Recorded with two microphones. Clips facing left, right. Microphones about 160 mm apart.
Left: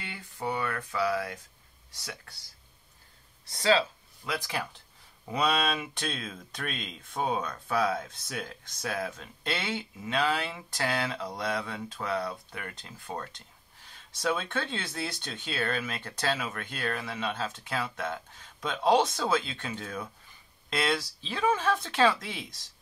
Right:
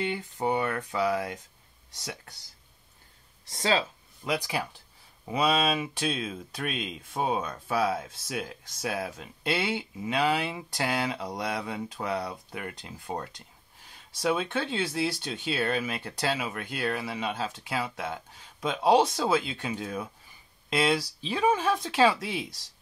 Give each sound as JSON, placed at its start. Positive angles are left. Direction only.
{"t": 0.0, "sound": "speech", "side_deg": -25}
{"t": 3.6, "sound": "speech", "side_deg": -20}